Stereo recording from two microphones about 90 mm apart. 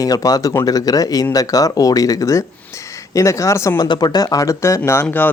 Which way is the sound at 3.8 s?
50° left (ahead or behind).